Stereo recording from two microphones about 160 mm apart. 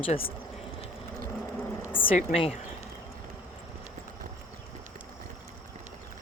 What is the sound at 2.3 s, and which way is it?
Speech, 40° left (ahead or behind).